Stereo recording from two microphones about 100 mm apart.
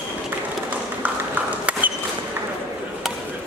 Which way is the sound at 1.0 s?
15° right (ahead or behind).